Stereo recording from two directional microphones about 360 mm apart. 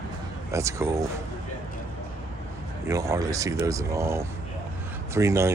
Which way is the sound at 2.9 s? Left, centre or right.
Centre.